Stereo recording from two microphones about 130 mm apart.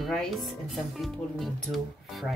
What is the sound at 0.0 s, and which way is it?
Speech, centre (ahead or behind).